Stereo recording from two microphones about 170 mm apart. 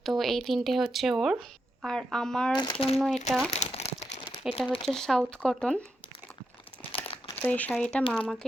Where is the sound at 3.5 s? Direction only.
40° left (ahead or behind).